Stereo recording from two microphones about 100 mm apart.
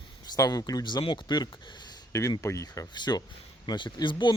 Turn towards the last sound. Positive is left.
turn(degrees=50)  # may be behind; listen again after turning